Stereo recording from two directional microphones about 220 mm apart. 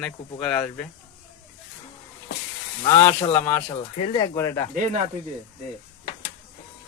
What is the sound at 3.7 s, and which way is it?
Speech, 25° left (ahead or behind).